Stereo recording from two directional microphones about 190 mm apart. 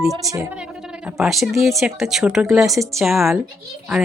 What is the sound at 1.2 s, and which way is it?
Speech, centre (ahead or behind).